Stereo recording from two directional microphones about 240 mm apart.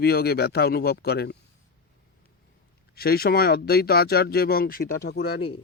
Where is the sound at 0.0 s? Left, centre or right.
Left.